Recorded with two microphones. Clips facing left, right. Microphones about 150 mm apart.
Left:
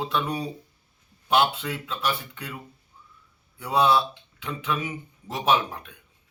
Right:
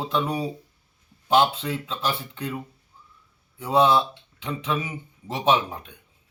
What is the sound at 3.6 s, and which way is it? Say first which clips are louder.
A man's voice: right 2 dB; 30° right (ahead or behind).